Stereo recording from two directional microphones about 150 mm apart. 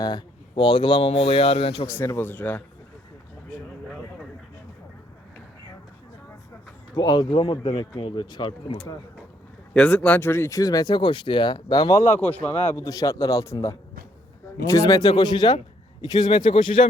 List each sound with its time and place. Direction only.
0.0 s speech: 30° left (ahead or behind)
2.0 s speech: 15° left (ahead or behind)
6.9 s speech: 30° left (ahead or behind)
9.7 s speech: 5° left (ahead or behind); by 12.0 s 25° left (ahead or behind)
12.2 s speech: 10° left (ahead or behind); by 16.8 s 35° left (ahead or behind)